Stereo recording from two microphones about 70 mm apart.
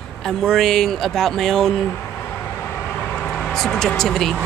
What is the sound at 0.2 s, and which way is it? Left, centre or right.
Speech, centre.